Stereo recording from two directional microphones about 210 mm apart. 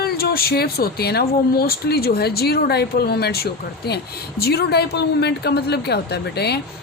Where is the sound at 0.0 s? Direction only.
45° left (ahead or behind).